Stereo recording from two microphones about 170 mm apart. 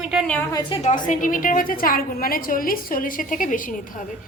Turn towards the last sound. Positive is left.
turn(degrees=50)  # may be behind; listen again after turning